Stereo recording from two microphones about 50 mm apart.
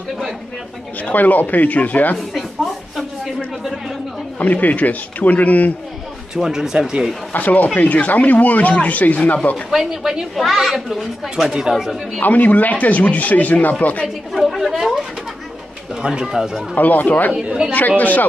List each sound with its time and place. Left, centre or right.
1.0 s speech: left
2.1 s a sound: centre
4.4 s speech: left
6.3 s speech: centre
7.3 s speech: left
9.7 s speech: centre
11.4 s speech: centre
11.7 s speech: centre
12.2 s speech: left
14.0 s speech: centre
16.0 s speech: centre
16.7 s speech: left
17.3 s speech: centre
17.7 s speech: left